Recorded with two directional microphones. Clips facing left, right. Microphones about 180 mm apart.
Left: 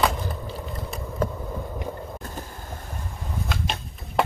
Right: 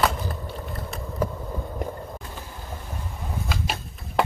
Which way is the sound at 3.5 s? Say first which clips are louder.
Even; centre (ahead or behind).